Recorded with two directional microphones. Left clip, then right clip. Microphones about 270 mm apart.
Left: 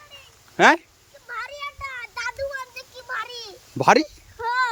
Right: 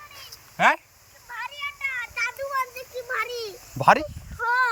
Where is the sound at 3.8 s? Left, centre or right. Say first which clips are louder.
Left 1 dB; left.